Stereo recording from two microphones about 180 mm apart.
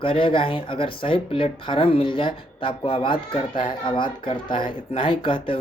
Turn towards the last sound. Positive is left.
turn(degrees=30)  # may be behind; listen again after turning